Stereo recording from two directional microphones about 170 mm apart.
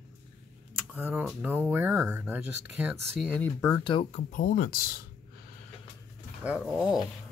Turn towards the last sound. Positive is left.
turn(degrees=0)  # may be behind; listen again after turning